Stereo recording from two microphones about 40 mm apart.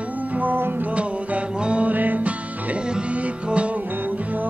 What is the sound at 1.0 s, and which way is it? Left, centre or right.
Music, right.